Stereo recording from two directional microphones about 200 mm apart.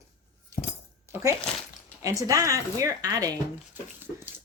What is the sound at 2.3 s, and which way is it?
Child singing, 15° right (ahead or behind).